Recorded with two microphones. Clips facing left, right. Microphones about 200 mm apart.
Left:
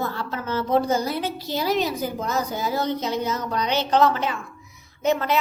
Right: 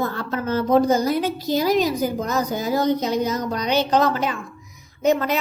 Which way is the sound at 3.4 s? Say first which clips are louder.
Right 1 dB; 40° right (ahead or behind).